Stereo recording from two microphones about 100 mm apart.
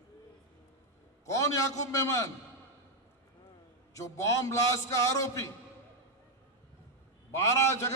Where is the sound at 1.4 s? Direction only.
30° left (ahead or behind).